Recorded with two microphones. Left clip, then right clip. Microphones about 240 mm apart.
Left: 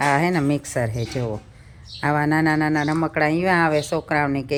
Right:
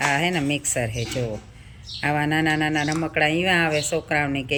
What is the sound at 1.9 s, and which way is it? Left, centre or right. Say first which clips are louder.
Speech: left 2 dB; centre.